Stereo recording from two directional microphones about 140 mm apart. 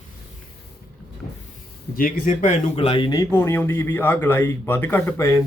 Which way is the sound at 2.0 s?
85° left.